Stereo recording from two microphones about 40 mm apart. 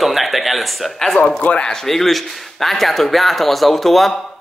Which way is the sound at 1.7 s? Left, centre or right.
Centre.